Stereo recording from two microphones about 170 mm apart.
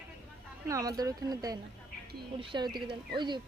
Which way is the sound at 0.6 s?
20° right (ahead or behind).